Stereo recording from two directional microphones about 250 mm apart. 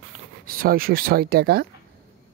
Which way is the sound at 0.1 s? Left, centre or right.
Right.